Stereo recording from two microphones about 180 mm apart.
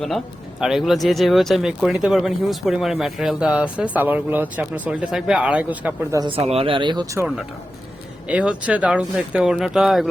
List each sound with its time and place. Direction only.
0.6 s speech: centre (ahead or behind)
6.1 s speech: 30° right (ahead or behind)
8.3 s speech: 5° right (ahead or behind)